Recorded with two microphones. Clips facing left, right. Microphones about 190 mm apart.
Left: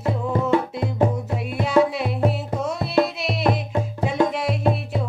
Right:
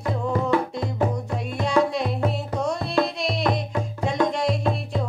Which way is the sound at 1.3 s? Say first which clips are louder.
Left 3 dB; 5° left (ahead or behind).